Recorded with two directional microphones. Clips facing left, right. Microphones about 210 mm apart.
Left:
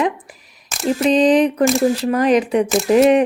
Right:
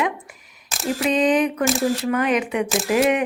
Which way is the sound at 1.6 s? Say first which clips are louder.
Left 5 dB; centre (ahead or behind).